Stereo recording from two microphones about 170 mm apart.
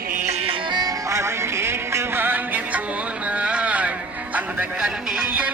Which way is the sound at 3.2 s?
5° right (ahead or behind).